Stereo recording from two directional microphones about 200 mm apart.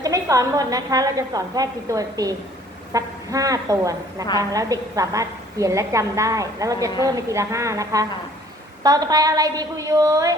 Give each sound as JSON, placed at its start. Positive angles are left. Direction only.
{"t": 0.0, "sound": "a woman's voice", "side_deg": -15}